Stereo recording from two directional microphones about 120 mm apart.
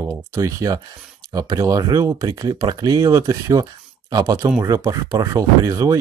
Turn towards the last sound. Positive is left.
turn(degrees=-30)  # may be behind; listen again after turning